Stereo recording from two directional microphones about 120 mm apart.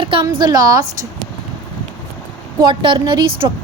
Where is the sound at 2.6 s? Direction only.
40° right (ahead or behind).